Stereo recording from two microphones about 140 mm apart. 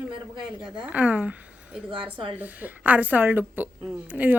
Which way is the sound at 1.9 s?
40° right (ahead or behind).